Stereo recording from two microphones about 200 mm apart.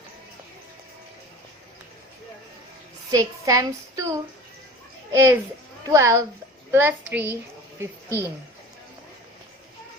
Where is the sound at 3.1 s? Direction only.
15° right (ahead or behind).